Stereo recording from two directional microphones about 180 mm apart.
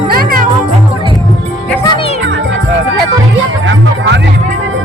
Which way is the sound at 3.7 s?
75° right (ahead or behind).